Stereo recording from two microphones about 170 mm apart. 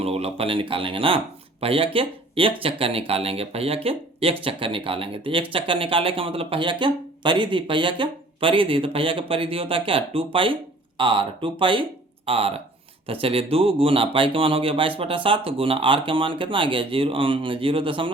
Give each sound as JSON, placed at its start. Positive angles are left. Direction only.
{"t": 0.0, "sound": "speech", "side_deg": -35}